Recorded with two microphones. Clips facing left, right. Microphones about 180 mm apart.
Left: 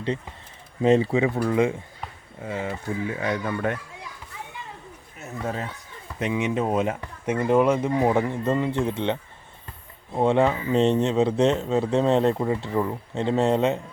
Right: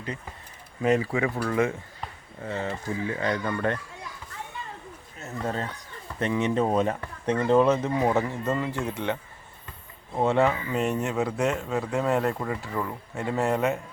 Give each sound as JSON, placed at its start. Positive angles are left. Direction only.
{"t": 0.8, "sound": "speech", "side_deg": 25}
{"t": 5.2, "sound": "speech", "side_deg": 5}
{"t": 10.2, "sound": "speech", "side_deg": 15}